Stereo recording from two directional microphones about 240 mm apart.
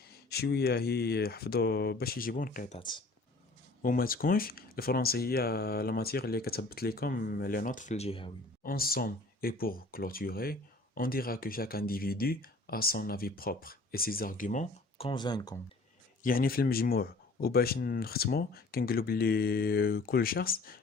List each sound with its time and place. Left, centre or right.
0.3 s speech: left
2.7 s speech: centre
3.8 s speech: left
8.6 s speech: left; by 15.5 s centre
16.2 s speech: left